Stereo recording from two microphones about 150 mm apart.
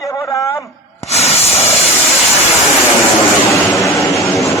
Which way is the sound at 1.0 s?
45° left (ahead or behind).